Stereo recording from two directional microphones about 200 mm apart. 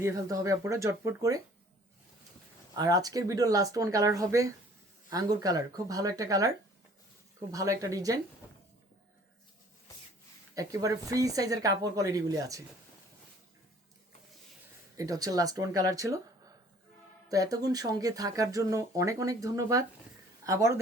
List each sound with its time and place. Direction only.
0.0 s speech: 15° right (ahead or behind)
2.7 s speech: 20° right (ahead or behind)
7.5 s speech: 15° right (ahead or behind)
10.5 s speech: 15° right (ahead or behind)
14.9 s speech: 15° right (ahead or behind)
17.2 s a woman's voice: 15° right (ahead or behind)